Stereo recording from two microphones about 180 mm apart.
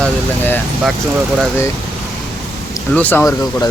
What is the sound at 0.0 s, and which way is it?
Speech, 10° left (ahead or behind).